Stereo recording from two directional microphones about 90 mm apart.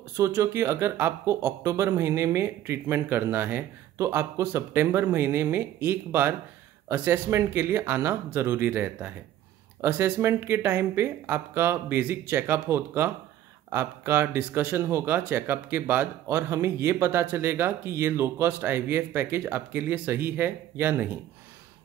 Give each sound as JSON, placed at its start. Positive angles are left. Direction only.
{"t": 0.2, "sound": "speech", "side_deg": -30}